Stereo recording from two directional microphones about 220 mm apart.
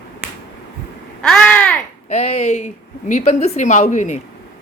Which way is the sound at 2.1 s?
30° left (ahead or behind).